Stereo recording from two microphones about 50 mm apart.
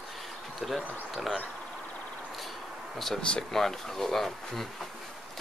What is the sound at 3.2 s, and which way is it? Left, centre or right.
Speech, centre.